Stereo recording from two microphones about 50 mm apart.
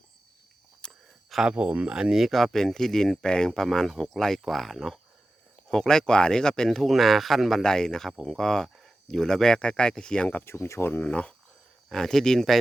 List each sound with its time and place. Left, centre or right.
0.8 s a sound: centre
1.5 s speech: right
1.9 s speech: centre
2.2 s speech: centre
7.6 s speech: centre
10.4 s speech: left
11.0 s speech: left
11.9 s speech: centre